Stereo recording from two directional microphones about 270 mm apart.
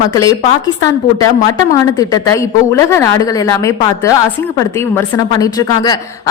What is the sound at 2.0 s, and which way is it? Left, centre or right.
A woman's voice, centre.